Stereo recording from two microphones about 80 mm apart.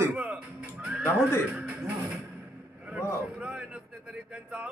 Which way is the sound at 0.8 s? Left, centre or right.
Centre.